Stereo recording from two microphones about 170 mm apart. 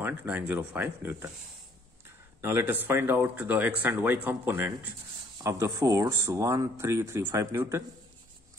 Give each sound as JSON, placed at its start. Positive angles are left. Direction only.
{"t": 0.0, "sound": "speech", "side_deg": -10}